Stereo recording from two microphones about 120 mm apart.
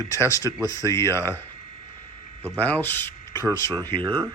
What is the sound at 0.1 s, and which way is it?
Speech, 25° left (ahead or behind).